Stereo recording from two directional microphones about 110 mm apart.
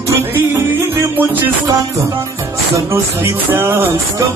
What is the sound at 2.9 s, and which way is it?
Music, 20° right (ahead or behind).